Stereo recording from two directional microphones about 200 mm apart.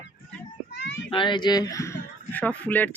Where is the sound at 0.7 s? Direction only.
60° left (ahead or behind).